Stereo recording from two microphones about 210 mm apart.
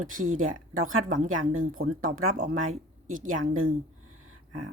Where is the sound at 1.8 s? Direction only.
45° right (ahead or behind).